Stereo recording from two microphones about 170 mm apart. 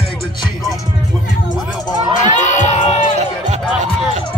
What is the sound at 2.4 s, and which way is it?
Speech, 45° left (ahead or behind).